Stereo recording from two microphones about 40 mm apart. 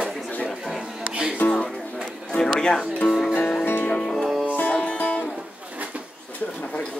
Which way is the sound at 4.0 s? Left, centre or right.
Centre.